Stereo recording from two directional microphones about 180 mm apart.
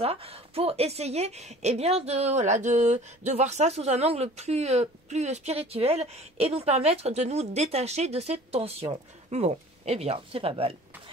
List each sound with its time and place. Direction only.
0.0 s speech: 35° right (ahead or behind)